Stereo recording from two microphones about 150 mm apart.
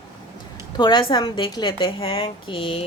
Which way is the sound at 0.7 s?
30° left (ahead or behind).